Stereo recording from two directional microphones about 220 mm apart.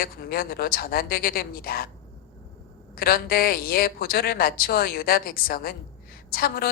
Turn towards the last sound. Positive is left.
turn(degrees=45)  # may be behind; listen again after turning